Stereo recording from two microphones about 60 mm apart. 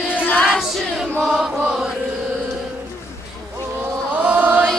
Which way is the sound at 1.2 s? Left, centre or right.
Centre.